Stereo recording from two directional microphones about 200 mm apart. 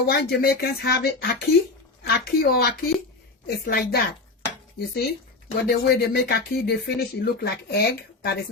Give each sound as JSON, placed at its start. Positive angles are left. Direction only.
{"t": 0.0, "sound": "speech", "side_deg": 55}